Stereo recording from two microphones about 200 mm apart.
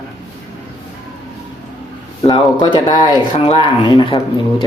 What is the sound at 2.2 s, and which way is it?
Speech, 20° left (ahead or behind).